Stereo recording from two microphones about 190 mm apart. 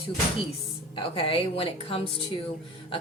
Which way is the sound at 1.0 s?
30° left (ahead or behind).